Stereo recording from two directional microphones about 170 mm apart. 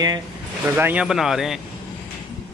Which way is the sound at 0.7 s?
10° right (ahead or behind).